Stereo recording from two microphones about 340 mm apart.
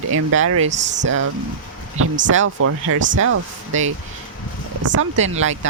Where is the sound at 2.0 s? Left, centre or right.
Right.